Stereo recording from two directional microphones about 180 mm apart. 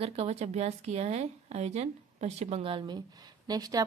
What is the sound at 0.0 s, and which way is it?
A woman's voice, 35° right (ahead or behind).